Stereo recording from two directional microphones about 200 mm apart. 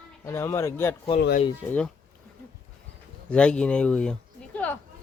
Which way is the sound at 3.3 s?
5° left (ahead or behind).